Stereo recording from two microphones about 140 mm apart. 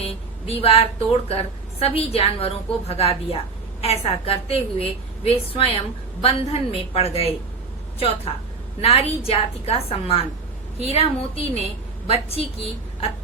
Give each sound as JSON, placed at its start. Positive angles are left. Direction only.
{"t": 0.4, "sound": "a woman's voice", "side_deg": 45}